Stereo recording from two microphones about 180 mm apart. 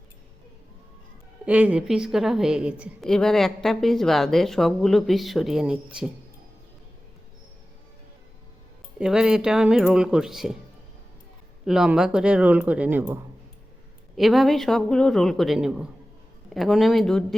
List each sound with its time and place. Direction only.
1.5 s a woman's voice: 10° right (ahead or behind)
9.0 s a woman's voice: 5° right (ahead or behind)
11.6 s a woman's voice: 5° right (ahead or behind)
14.2 s a woman's voice: centre (ahead or behind)